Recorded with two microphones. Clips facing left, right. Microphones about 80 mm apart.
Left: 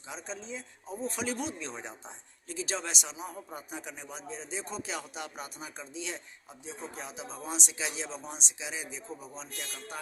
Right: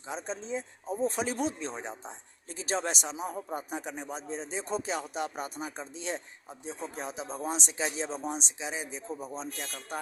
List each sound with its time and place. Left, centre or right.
0.1 s speech: right
1.7 s speech: right
2.5 s speech: right